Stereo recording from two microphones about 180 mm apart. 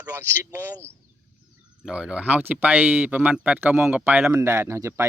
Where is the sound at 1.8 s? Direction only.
5° right (ahead or behind).